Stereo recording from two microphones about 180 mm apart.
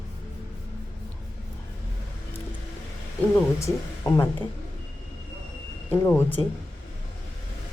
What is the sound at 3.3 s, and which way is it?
Speech, 15° left (ahead or behind).